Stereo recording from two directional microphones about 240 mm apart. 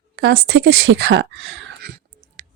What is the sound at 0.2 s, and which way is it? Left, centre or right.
Speech, right.